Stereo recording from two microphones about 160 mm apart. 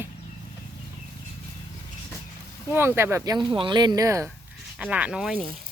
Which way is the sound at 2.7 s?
15° right (ahead or behind).